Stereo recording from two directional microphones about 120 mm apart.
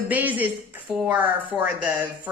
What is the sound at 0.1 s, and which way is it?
Speech, 15° right (ahead or behind).